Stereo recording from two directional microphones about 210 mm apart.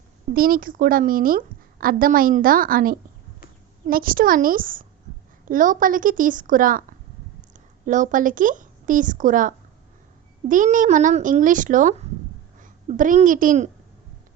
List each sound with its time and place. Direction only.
0.3 s a woman's voice: 45° right (ahead or behind)
7.9 s a woman's voice: 35° right (ahead or behind)